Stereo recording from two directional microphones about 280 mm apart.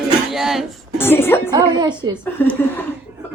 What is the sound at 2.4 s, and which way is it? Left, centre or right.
Speech, centre.